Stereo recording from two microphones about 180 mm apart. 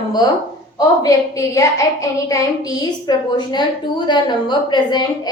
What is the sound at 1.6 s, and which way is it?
A woman's voice, 15° left (ahead or behind).